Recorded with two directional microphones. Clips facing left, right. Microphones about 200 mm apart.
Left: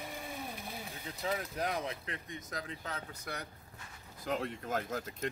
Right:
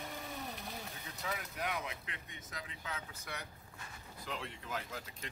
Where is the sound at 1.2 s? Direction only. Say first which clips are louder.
Left 5 dB; 35° left (ahead or behind).